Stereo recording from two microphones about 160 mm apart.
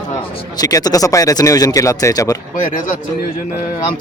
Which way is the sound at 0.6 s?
20° left (ahead or behind).